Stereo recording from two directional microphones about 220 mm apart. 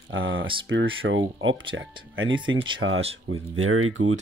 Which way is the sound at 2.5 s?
60° right (ahead or behind).